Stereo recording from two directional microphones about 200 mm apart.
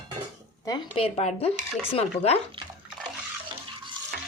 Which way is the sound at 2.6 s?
25° right (ahead or behind).